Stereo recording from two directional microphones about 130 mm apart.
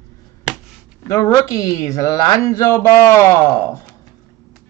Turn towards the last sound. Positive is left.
turn(degrees=25)  # may be behind; listen again after turning